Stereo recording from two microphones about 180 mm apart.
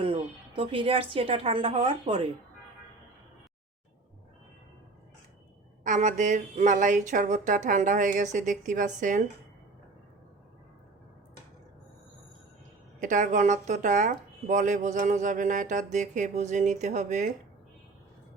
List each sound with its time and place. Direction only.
0.0 s a woman's voice: 30° right (ahead or behind)
5.8 s speech: 45° right (ahead or behind)
13.0 s speech: 45° right (ahead or behind)